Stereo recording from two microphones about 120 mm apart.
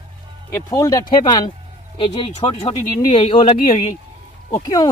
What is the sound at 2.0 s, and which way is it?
Speech, 50° left (ahead or behind).